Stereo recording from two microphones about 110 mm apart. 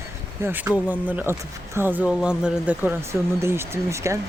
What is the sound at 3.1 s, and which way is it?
Speech, 25° right (ahead or behind).